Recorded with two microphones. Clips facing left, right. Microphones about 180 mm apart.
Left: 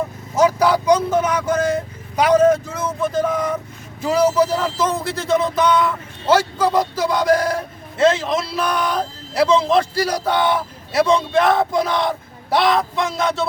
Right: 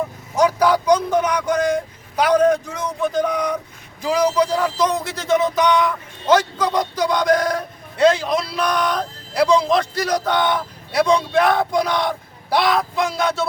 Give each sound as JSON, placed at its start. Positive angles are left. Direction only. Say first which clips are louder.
{"t": 0.3, "sound": "speech", "louder": "left 1 dB", "side_deg": 5}